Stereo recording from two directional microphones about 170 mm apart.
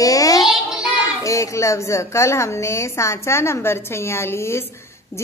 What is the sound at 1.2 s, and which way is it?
A woman's voice, 20° left (ahead or behind).